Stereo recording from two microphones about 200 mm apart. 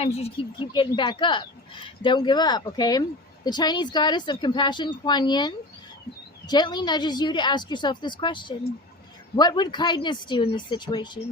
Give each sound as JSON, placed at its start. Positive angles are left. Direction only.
{"t": 0.0, "sound": "speech", "side_deg": 30}